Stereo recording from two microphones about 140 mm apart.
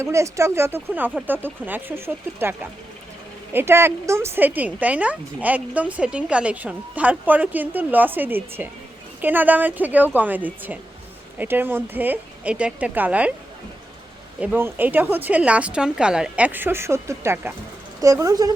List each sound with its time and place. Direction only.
0.0 s a woman's voice: 20° right (ahead or behind)
14.4 s a woman's voice: 15° right (ahead or behind)